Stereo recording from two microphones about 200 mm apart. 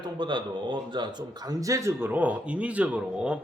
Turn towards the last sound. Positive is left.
turn(degrees=-5)  # may be behind; listen again after turning